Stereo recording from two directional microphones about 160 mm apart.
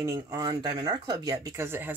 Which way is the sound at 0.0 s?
20° right (ahead or behind).